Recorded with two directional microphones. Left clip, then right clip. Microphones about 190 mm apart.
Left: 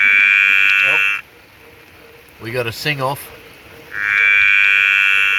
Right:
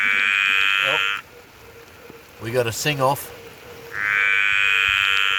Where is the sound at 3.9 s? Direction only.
30° left (ahead or behind).